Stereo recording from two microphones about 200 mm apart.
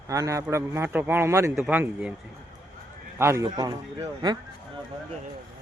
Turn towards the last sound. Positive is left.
turn(degrees=-20)  # may be behind; listen again after turning